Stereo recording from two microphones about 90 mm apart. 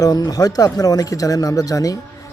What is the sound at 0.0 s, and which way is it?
A man's voice, 45° left (ahead or behind).